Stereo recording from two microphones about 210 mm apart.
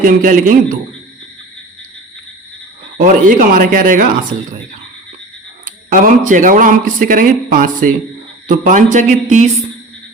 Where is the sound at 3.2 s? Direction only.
40° right (ahead or behind).